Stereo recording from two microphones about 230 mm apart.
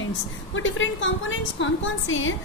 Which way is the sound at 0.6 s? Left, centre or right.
Left.